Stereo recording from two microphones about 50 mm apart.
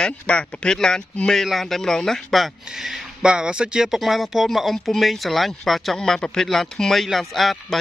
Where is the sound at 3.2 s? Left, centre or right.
Centre.